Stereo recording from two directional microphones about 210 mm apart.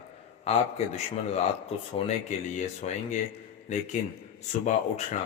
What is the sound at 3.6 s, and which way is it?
Speech, 35° left (ahead or behind).